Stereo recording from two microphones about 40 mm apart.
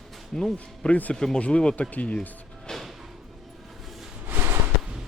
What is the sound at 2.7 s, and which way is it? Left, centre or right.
Music, centre.